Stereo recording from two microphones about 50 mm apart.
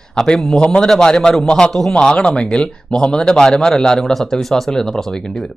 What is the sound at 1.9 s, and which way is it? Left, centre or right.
Speech, centre.